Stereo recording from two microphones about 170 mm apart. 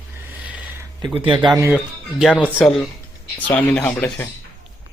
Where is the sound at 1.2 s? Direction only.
30° right (ahead or behind).